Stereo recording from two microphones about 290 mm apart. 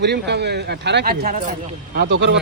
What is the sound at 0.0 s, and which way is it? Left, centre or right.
Speech, right.